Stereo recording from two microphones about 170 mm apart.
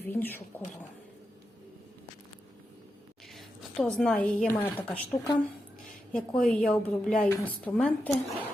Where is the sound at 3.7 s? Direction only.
Centre (ahead or behind).